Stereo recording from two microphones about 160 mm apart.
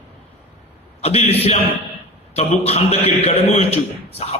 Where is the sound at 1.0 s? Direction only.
40° left (ahead or behind).